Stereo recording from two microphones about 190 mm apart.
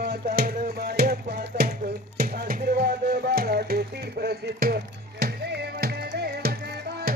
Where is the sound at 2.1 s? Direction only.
55° right (ahead or behind).